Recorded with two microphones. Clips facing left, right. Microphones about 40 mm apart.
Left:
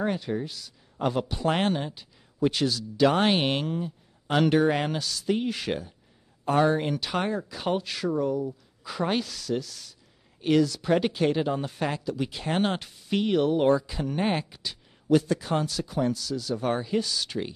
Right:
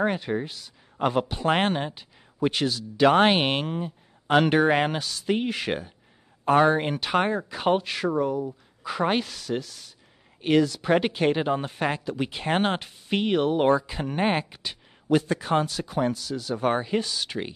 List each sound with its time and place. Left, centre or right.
0.0 s speech: right